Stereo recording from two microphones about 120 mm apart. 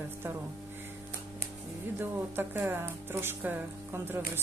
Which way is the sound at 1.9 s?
15° right (ahead or behind).